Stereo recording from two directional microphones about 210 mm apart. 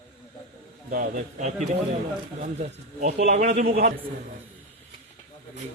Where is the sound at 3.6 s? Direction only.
45° right (ahead or behind).